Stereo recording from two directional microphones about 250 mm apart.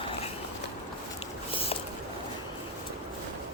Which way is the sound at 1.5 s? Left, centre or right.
Left.